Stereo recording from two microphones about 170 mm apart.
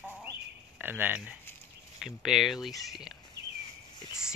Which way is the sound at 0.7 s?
10° right (ahead or behind).